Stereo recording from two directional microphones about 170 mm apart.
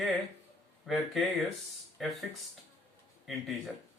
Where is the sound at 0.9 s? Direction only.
Centre (ahead or behind).